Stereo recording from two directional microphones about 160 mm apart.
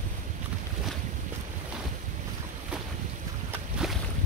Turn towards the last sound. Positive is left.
turn(degrees=-5)  # may be behind; listen again after turning